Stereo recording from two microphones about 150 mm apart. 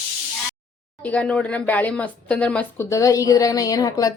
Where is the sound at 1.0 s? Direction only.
10° left (ahead or behind).